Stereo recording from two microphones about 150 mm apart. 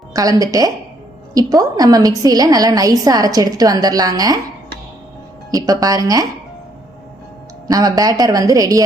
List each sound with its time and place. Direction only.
0.1 s a woman's voice: 25° right (ahead or behind)
5.5 s a woman's voice: 25° right (ahead or behind)
7.7 s a woman's voice: 25° right (ahead or behind)